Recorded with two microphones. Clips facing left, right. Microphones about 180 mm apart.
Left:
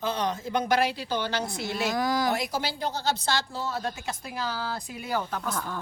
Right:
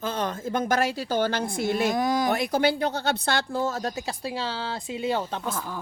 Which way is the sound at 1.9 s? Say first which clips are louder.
Right 2 dB; 20° right (ahead or behind).